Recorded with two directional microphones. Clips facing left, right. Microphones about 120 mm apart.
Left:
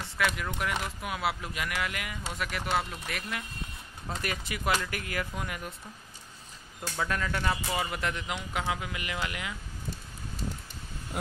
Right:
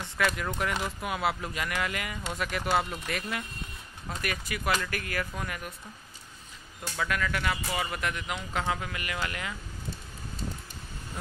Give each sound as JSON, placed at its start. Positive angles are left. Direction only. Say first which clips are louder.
{"t": 0.2, "sound": "speech", "louder": "right 2 dB", "side_deg": 0}
{"t": 4.1, "sound": "speech", "louder": "even", "side_deg": 25}
{"t": 7.1, "sound": "speech", "louder": "right 1 dB", "side_deg": 30}
{"t": 7.7, "sound": "speech", "louder": "even", "side_deg": 15}
{"t": 8.6, "sound": "speech", "louder": "right 1 dB", "side_deg": 10}